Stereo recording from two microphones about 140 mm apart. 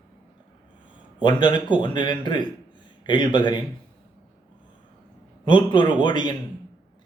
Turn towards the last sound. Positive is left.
turn(degrees=30)  # may be behind; listen again after turning